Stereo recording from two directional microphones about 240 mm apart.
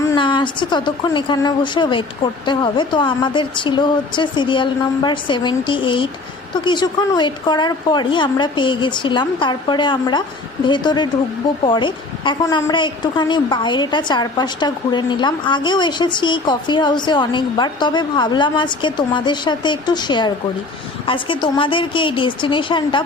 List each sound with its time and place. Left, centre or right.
0.0 s a woman's voice: centre